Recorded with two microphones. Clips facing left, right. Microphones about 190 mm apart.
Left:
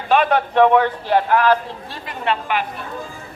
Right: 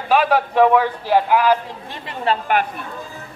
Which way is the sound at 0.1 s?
5° right (ahead or behind).